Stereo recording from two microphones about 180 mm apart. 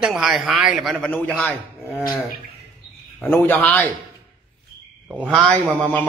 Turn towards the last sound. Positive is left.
turn(degrees=10)  # may be behind; listen again after turning